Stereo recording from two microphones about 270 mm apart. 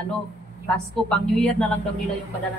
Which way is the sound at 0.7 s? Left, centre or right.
Centre.